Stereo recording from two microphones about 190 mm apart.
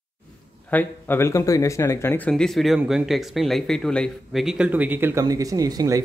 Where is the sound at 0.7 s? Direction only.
10° left (ahead or behind).